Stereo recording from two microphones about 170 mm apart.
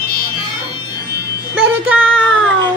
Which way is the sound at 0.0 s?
65° left (ahead or behind).